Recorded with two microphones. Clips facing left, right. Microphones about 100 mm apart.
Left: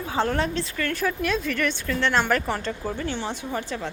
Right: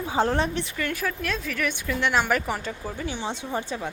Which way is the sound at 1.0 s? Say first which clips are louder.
Left 4 dB; centre (ahead or behind).